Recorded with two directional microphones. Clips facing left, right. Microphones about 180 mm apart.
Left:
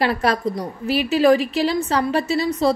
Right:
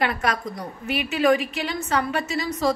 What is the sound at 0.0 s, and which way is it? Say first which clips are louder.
Speech: left 5 dB; 30° left (ahead or behind).